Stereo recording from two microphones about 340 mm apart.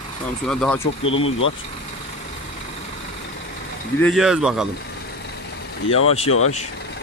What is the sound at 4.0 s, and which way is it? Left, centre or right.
Speech, centre.